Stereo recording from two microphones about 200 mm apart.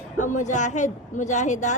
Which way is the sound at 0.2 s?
35° left (ahead or behind).